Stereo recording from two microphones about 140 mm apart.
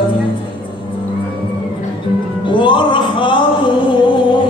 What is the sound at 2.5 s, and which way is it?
Music, 35° left (ahead or behind).